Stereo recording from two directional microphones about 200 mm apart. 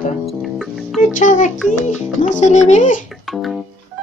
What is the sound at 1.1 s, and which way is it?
Speech, 40° left (ahead or behind).